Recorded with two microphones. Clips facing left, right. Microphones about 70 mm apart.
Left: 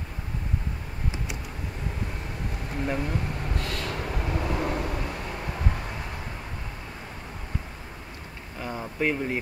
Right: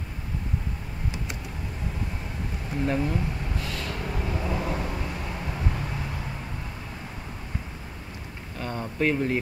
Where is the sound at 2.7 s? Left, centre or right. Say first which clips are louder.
Right 3 dB; centre.